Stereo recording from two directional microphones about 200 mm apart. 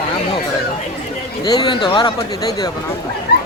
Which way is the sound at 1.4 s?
20° left (ahead or behind).